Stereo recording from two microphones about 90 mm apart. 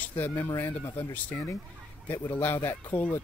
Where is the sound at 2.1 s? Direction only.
20° left (ahead or behind).